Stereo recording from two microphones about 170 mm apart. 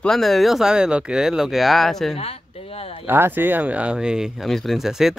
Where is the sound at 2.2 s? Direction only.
35° left (ahead or behind).